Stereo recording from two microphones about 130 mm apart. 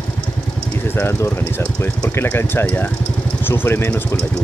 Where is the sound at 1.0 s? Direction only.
20° left (ahead or behind).